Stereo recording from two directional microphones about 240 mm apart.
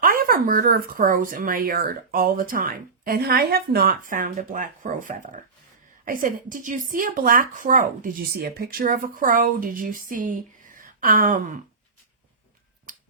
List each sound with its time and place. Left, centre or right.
0.0 s a woman's voice: right
12.9 s finger snapping: right